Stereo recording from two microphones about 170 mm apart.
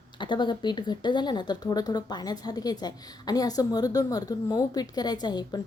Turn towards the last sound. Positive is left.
turn(degrees=25)  # may be behind; listen again after turning